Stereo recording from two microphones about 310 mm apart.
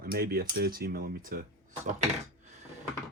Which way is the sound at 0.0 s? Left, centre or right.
Right.